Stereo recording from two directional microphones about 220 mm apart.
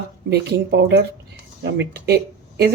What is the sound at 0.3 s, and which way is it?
Speech, 50° right (ahead or behind).